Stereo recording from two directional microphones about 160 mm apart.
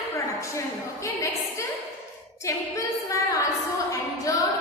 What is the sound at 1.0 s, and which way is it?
Speech, 20° left (ahead or behind).